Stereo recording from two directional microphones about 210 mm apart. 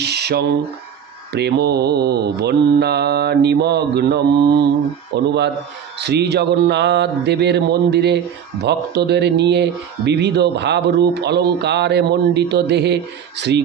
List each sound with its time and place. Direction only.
0.0 s speech: 50° right (ahead or behind)